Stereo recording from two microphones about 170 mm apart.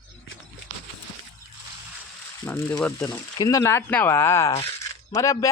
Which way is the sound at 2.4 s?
15° left (ahead or behind).